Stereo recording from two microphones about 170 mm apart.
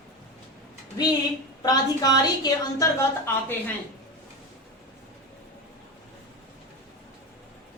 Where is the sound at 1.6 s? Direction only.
20° left (ahead or behind).